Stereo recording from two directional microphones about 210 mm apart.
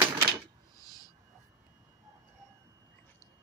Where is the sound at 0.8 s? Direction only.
15° left (ahead or behind).